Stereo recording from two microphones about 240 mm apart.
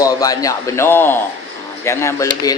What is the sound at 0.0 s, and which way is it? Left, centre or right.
A man's voice, centre.